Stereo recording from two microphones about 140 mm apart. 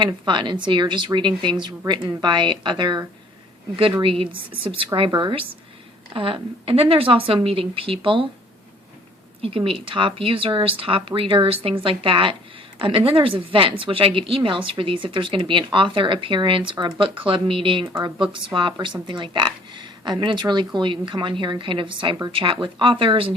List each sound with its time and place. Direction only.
0.0 s speech: 35° right (ahead or behind)
4.9 s speech: 35° right (ahead or behind)
9.4 s speech: 40° right (ahead or behind)